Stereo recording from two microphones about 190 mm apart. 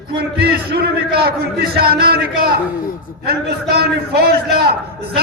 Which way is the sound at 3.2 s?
55° right (ahead or behind).